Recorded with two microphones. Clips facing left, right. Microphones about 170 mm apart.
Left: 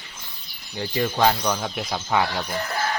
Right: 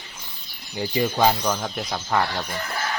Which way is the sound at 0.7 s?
10° right (ahead or behind).